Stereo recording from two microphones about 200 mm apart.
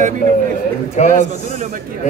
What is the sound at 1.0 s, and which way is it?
Speech, 35° left (ahead or behind).